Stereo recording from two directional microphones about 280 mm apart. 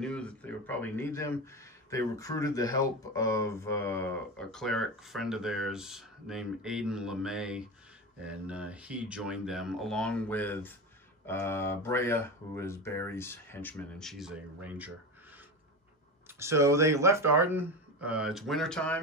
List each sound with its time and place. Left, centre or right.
0.0 s speech: centre
16.3 s speech: centre